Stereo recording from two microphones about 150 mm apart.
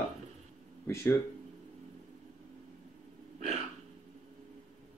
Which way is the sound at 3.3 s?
50° right (ahead or behind).